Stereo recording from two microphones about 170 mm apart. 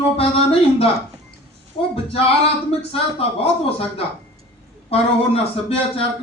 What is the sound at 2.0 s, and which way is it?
Speech, 35° left (ahead or behind).